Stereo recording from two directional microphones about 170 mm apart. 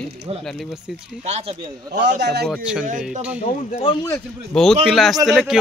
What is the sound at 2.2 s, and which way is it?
Speech, 80° right.